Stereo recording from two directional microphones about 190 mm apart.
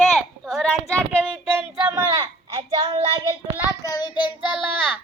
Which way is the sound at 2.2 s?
25° right (ahead or behind).